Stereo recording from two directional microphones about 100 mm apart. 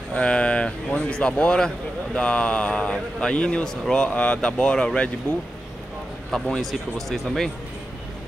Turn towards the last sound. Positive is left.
turn(degrees=5)  # may be behind; listen again after turning